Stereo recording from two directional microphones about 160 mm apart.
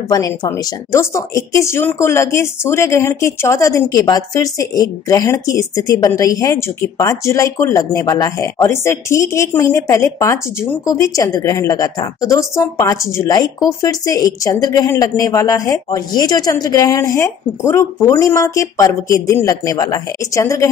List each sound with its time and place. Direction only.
0.1 s speech: 20° left (ahead or behind)